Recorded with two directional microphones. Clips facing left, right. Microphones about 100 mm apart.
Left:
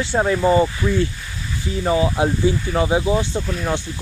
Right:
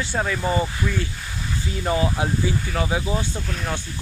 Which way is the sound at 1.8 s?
20° left (ahead or behind).